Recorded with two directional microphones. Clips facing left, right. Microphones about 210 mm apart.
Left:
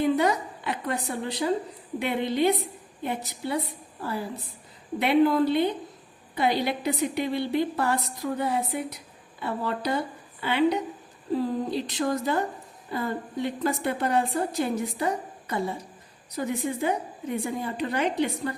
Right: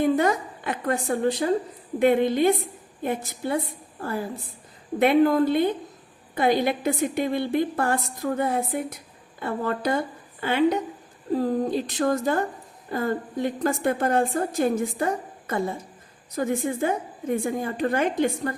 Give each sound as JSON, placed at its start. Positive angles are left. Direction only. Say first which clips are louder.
{"t": 0.0, "sound": "a woman's voice", "louder": "right 2 dB", "side_deg": -50}